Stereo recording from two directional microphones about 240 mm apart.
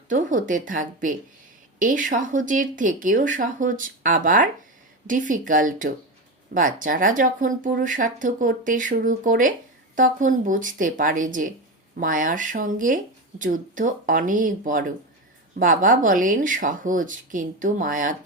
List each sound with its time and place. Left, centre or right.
0.1 s speech: right